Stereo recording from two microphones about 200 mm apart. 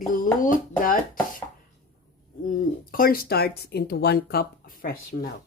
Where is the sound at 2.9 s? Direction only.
45° left (ahead or behind).